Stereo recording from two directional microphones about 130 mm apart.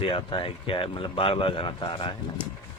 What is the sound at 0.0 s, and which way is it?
Speech, 40° left (ahead or behind).